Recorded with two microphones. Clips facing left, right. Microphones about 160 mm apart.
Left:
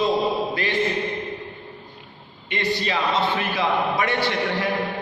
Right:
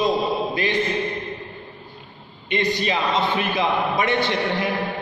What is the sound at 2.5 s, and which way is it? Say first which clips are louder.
A man's voice: right 2 dB; 20° right (ahead or behind).